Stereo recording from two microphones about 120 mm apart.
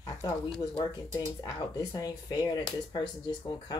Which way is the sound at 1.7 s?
30° left (ahead or behind).